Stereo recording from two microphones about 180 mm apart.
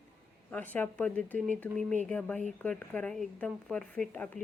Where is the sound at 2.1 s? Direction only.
5° left (ahead or behind).